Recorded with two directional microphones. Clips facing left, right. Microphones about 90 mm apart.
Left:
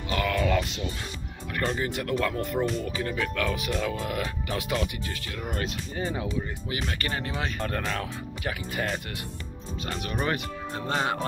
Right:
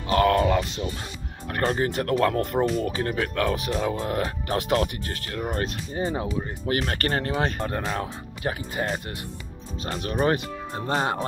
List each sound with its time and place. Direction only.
0.1 s music: 40° right (ahead or behind)
0.5 s speech: 30° right (ahead or behind)
1.5 s speech: 40° right (ahead or behind)
6.7 s speech: 50° right (ahead or behind)
7.3 s speech: 40° right (ahead or behind)